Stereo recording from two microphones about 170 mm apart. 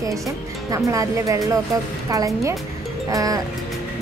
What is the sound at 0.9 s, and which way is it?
A woman's voice, 20° right (ahead or behind).